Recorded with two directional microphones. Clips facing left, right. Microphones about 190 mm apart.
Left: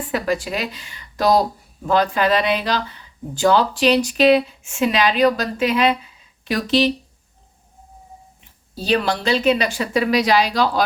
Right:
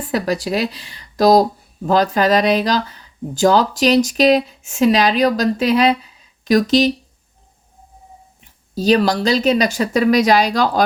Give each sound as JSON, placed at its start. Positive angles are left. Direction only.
{"t": 0.1, "sound": "speech", "side_deg": -40}
{"t": 8.7, "sound": "speech", "side_deg": -40}